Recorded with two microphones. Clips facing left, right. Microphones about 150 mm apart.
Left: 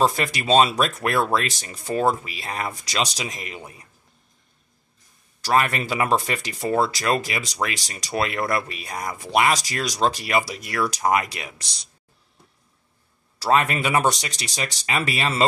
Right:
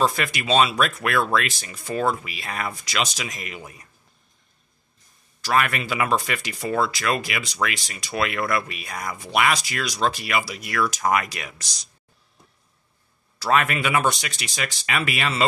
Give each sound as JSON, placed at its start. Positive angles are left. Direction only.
{"t": 0.0, "sound": "speech", "side_deg": 35}
{"t": 5.4, "sound": "speech", "side_deg": 30}
{"t": 13.4, "sound": "speech", "side_deg": 30}